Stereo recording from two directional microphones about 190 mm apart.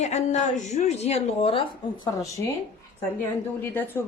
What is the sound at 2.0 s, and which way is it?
Speech, 15° left (ahead or behind).